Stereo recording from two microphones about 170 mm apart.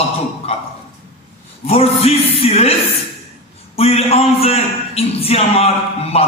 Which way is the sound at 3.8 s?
35° left (ahead or behind).